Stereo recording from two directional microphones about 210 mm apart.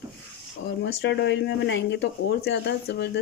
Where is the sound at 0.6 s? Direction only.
55° left (ahead or behind).